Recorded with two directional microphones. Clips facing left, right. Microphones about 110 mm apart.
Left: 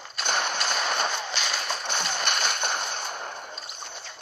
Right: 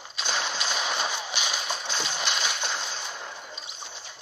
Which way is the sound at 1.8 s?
55° left (ahead or behind).